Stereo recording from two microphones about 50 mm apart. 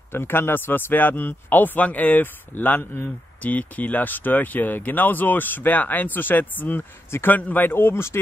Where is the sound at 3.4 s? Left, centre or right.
Left.